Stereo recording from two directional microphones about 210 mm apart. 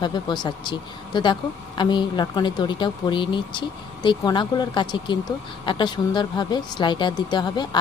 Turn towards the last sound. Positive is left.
turn(degrees=20)  # may be behind; listen again after turning